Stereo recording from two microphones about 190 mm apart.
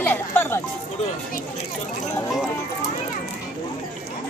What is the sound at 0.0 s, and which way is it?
Music, 10° left (ahead or behind).